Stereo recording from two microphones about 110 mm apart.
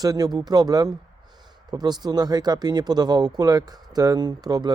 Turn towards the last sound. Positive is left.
turn(degrees=-40)  # may be behind; listen again after turning